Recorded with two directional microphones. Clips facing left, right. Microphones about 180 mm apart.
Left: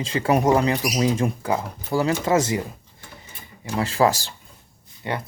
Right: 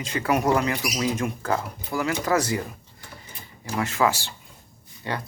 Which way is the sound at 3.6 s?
30° left (ahead or behind).